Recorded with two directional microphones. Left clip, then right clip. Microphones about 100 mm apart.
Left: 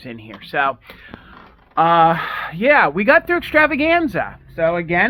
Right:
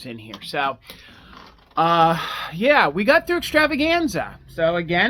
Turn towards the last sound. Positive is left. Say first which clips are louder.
# left 2 dB
turn(degrees=-40)  # may be behind; listen again after turning